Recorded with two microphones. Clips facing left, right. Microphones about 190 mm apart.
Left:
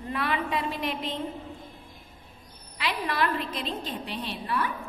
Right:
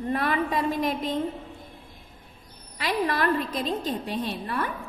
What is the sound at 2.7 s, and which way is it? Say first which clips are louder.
A woman's voice: right 4 dB; 45° right (ahead or behind).